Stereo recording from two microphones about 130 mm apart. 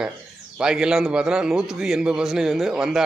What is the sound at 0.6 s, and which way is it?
A man's voice, 5° right (ahead or behind).